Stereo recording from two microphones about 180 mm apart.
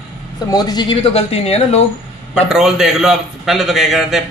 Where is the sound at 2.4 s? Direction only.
Centre (ahead or behind).